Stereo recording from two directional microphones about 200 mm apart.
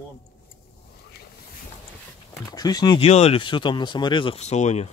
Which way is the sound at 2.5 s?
20° left (ahead or behind).